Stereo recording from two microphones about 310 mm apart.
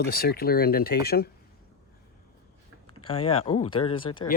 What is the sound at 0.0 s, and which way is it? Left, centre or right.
Speech, left.